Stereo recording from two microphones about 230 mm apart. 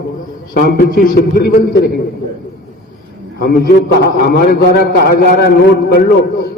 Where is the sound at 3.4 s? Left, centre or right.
Left.